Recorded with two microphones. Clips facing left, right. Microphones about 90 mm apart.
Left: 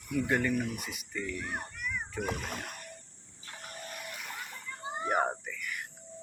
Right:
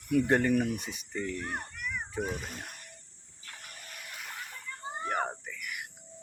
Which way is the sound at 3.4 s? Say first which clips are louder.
Left 4 dB; 30° left (ahead or behind).